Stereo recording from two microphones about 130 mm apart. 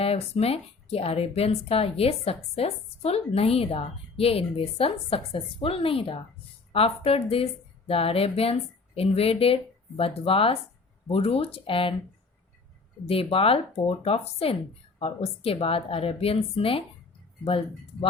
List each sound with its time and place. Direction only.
0.0 s speech: 50° left (ahead or behind)
13.1 s speech: 45° left (ahead or behind)